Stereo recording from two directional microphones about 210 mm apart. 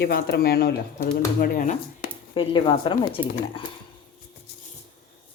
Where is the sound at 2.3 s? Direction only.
25° left (ahead or behind).